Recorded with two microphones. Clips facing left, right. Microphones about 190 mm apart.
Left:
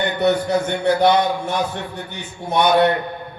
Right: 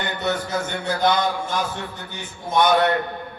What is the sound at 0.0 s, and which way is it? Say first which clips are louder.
A man's voice: left 7 dB; 65° left (ahead or behind).